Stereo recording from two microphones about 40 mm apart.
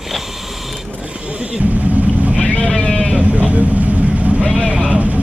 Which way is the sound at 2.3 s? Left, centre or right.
Left.